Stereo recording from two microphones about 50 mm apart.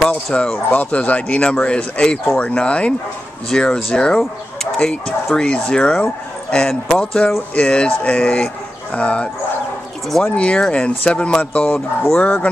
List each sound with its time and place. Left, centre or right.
0.1 s speech: centre
0.7 s speech: left
3.4 s speech: centre
7.5 s speech: left
10.0 s speech: centre
10.3 s speech: left